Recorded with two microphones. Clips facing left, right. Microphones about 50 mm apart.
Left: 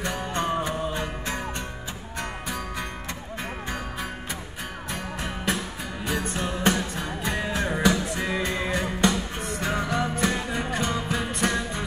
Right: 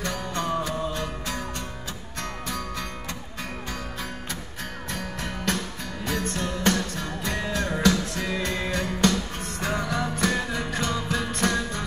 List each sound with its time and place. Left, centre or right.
0.0 s music: left
4.9 s music: centre